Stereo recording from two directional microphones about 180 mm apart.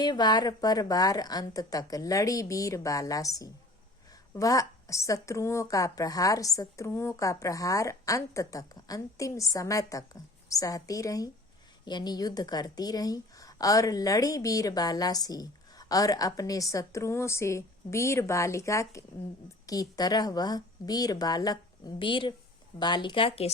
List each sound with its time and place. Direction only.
0.0 s a woman's voice: 25° left (ahead or behind)